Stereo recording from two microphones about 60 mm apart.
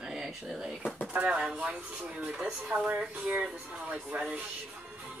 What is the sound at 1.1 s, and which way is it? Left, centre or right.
Speech, right.